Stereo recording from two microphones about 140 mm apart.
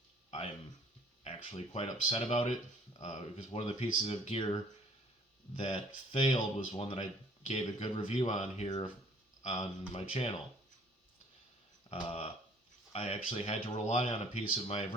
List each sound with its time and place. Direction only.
0.3 s a sound: 50° left (ahead or behind)
1.2 s speech: 45° left (ahead or behind)
5.5 s speech: 40° left (ahead or behind); by 9.6 s 55° left (ahead or behind)
9.9 s speech: 40° left (ahead or behind)
11.9 s speech: 40° left (ahead or behind)
14.1 s speech: 45° left (ahead or behind)